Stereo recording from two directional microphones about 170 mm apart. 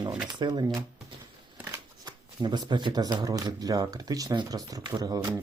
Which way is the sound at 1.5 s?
10° right (ahead or behind).